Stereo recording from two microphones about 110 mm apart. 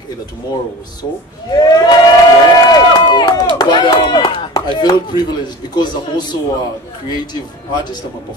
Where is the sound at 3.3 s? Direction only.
40° left (ahead or behind).